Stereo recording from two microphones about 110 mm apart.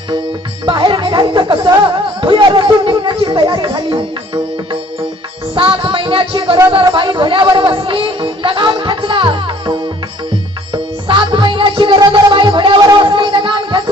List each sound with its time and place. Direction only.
0.6 s speech: 45° right (ahead or behind)
5.5 s music: 50° right (ahead or behind)
12.8 s a sound: 40° right (ahead or behind)